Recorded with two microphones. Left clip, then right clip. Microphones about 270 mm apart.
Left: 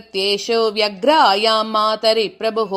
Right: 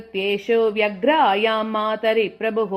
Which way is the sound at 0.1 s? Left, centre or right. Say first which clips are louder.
Left 2 dB; left.